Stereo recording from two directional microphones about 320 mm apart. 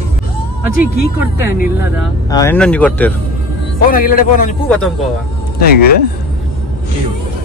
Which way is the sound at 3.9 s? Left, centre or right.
Left.